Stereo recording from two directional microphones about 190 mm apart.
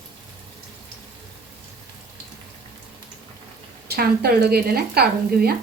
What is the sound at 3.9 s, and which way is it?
Speech, 55° right (ahead or behind).